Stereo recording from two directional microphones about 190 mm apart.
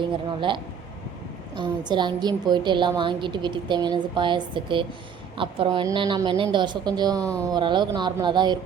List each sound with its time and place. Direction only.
0.0 s a woman's voice: 25° right (ahead or behind)